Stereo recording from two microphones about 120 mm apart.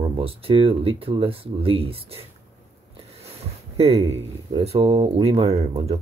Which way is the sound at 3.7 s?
60° right (ahead or behind).